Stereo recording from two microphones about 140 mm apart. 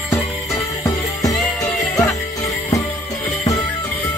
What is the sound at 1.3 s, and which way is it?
Music, centre (ahead or behind).